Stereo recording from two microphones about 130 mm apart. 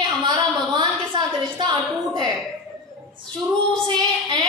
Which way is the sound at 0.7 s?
35° right (ahead or behind).